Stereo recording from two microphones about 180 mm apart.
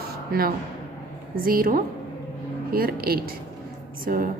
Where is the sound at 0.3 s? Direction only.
55° right (ahead or behind).